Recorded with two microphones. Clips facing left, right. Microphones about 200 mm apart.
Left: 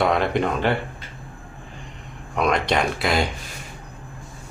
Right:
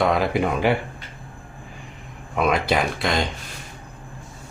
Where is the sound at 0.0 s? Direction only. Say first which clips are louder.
Even; centre (ahead or behind).